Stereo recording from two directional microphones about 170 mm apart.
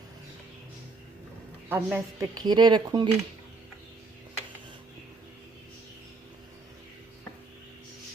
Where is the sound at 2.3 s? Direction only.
25° right (ahead or behind).